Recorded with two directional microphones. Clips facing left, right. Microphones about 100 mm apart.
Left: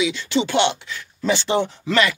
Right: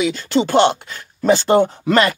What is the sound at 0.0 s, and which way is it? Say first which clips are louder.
Speech: right 3 dB; 45° right (ahead or behind).